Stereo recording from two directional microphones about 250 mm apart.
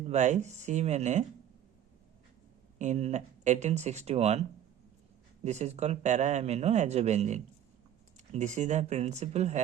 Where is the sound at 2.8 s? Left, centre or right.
Right.